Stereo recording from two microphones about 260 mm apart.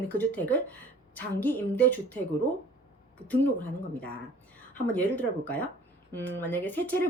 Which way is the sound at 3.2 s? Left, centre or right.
Centre.